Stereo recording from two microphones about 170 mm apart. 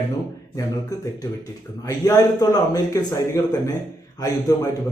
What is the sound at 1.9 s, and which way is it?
A man's voice, 20° left (ahead or behind).